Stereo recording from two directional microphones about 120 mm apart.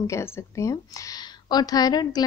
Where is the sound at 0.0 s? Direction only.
25° left (ahead or behind).